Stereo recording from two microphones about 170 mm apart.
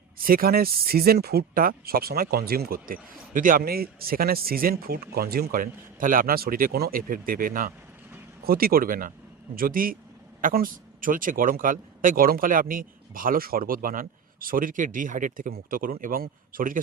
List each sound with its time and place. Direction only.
0.2 s speech: 60° right (ahead or behind)